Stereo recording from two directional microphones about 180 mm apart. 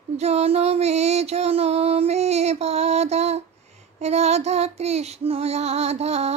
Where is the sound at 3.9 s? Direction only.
35° right (ahead or behind).